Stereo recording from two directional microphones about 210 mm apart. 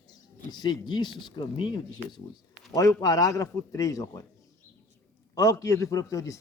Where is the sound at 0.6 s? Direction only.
20° left (ahead or behind).